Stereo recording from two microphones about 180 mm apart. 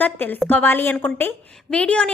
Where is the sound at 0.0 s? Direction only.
10° left (ahead or behind).